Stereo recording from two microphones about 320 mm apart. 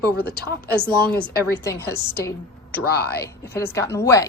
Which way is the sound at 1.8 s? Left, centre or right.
Left.